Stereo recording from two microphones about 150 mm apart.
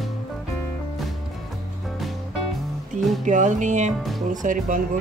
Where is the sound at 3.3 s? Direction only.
55° right (ahead or behind).